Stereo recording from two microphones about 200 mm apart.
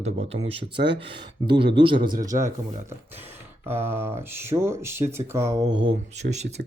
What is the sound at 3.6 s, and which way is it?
Speech, 10° right (ahead or behind).